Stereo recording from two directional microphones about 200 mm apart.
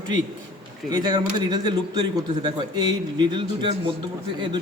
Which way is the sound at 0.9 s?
20° right (ahead or behind).